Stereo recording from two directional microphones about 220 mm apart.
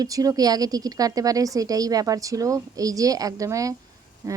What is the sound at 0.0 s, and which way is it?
Speech, 15° right (ahead or behind).